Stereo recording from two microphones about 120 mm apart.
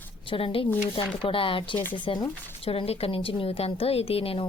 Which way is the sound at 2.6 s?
55° left (ahead or behind).